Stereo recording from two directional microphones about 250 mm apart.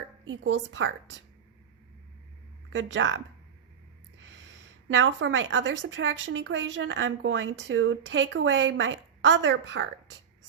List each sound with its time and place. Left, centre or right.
0.3 s speech: right
2.7 s speech: right
4.2 s speech: right